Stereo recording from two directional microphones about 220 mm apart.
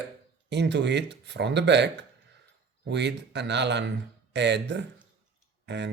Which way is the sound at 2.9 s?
50° right (ahead or behind).